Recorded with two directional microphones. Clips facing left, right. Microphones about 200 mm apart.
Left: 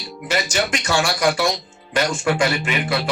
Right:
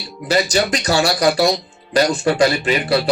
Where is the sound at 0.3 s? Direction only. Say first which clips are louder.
Right 5 dB; 35° right (ahead or behind).